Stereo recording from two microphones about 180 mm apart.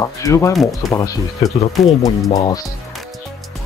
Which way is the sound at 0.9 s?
20° left (ahead or behind).